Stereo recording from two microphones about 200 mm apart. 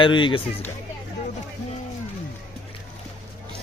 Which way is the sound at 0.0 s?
25° left (ahead or behind).